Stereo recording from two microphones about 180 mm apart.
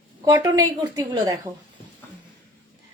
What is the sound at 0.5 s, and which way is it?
Speech, 20° right (ahead or behind).